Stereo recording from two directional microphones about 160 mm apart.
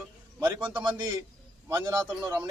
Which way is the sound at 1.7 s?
15° right (ahead or behind).